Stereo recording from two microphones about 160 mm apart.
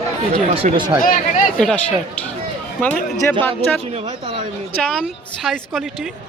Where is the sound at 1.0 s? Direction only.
60° left (ahead or behind).